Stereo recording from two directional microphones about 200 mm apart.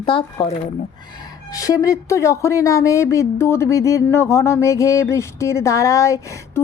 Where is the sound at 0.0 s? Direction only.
25° left (ahead or behind).